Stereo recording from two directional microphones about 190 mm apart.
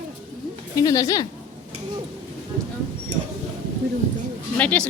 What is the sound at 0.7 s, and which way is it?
Speech, 20° left (ahead or behind).